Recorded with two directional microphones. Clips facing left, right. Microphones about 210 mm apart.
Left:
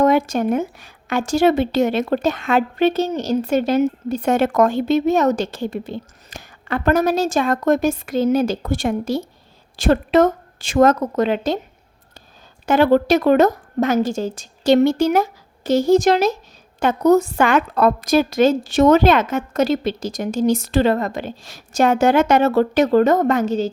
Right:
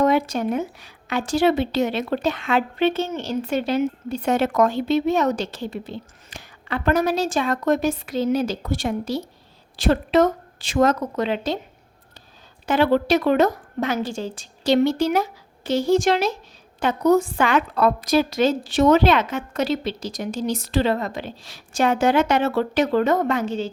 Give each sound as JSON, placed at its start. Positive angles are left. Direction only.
{"t": 0.0, "sound": "a woman's voice", "side_deg": 45}
{"t": 12.6, "sound": "a woman's voice", "side_deg": 45}